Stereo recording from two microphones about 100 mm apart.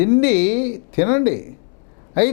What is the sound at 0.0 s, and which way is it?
Speech, 10° left (ahead or behind).